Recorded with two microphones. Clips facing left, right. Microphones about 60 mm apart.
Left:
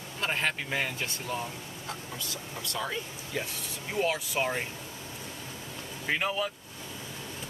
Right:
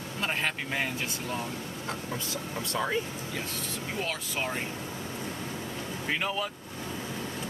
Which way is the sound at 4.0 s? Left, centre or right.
Centre.